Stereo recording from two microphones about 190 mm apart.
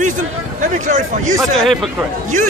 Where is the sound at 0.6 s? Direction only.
40° right (ahead or behind).